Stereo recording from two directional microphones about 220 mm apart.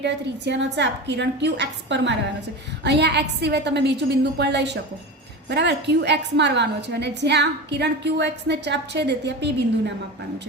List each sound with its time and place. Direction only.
0.0 s a woman's voice: 50° right (ahead or behind)